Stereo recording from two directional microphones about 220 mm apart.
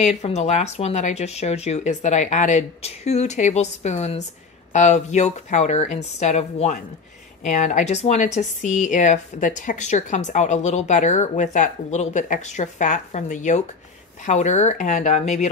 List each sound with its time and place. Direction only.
0.0 s a woman's voice: 30° left (ahead or behind)